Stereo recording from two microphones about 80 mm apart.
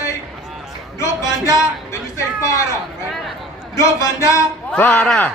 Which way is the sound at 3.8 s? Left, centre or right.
Left.